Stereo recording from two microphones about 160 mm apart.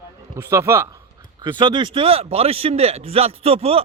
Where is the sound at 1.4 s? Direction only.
30° right (ahead or behind).